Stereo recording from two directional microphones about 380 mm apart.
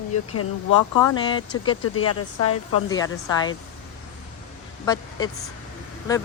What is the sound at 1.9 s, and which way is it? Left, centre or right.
Speech, left.